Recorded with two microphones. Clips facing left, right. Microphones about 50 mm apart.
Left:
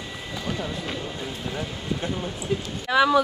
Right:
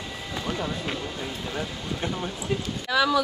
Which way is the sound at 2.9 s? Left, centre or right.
Left.